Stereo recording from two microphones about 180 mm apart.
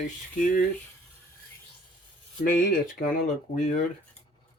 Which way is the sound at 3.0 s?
45° left (ahead or behind).